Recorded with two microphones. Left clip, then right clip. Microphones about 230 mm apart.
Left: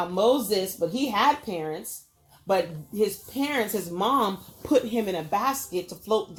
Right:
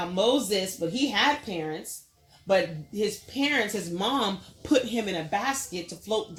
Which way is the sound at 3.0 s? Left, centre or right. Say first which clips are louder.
Left 2 dB; left.